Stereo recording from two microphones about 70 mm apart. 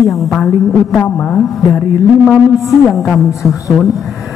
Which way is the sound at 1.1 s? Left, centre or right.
Left.